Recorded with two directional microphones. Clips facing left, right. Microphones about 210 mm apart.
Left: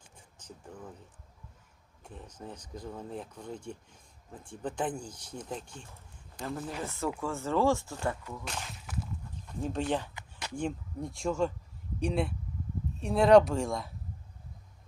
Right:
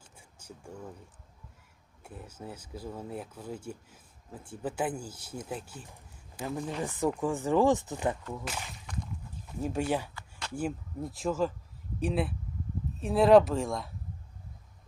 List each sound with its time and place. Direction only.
0.2 s a sound: 10° right (ahead or behind)
2.0 s speech: 5° right (ahead or behind)
8.4 s speech: 5° right (ahead or behind)